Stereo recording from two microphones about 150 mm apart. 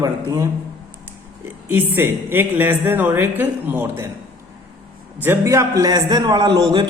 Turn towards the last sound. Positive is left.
turn(degrees=-25)  # may be behind; listen again after turning